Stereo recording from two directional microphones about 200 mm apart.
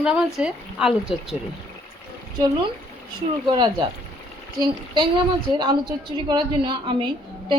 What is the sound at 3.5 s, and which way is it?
A woman's voice, 20° right (ahead or behind).